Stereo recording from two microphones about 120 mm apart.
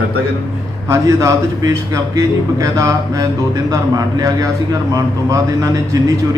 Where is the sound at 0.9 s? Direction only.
25° right (ahead or behind).